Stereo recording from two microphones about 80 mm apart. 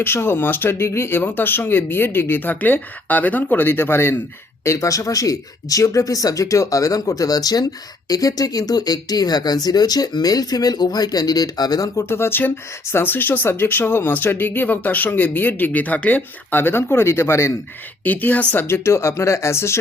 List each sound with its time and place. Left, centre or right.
0.0 s speech: left
4.6 s speech: left
12.0 s speech: left
18.0 s speech: left